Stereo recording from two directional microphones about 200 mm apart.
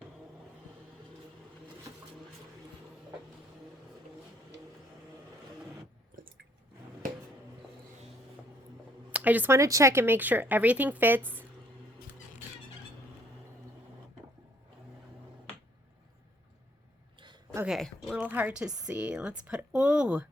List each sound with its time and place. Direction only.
9.1 s speech: 10° right (ahead or behind)
17.2 s a sound: 20° right (ahead or behind)
17.6 s speech: centre (ahead or behind)